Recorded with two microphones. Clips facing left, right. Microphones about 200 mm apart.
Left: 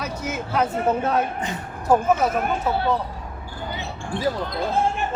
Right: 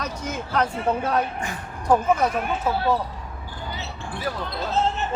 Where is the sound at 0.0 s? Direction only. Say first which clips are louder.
Left 2 dB; 5° left (ahead or behind).